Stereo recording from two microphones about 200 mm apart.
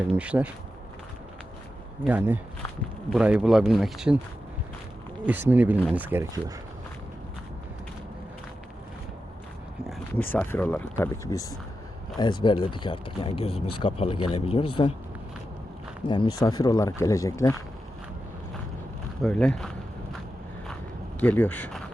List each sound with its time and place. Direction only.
0.2 s speech: 5° right (ahead or behind)
2.0 s speech: 10° right (ahead or behind)
5.2 s speech: 10° right (ahead or behind)
10.2 s speech: 10° left (ahead or behind); by 14.9 s 30° left (ahead or behind)
16.0 s speech: 25° left (ahead or behind)
19.2 s speech: 5° left (ahead or behind)
21.2 s speech: 10° left (ahead or behind)